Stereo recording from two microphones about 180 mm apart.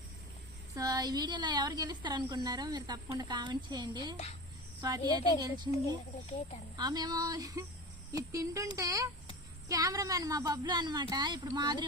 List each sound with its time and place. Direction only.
0.8 s a woman's voice: 20° right (ahead or behind)
6.7 s a woman's voice: 20° right (ahead or behind)